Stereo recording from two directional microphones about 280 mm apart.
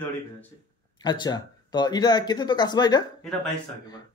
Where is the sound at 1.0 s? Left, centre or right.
Centre.